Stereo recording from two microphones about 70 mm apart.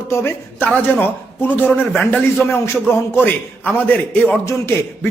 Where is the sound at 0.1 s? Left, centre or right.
Left.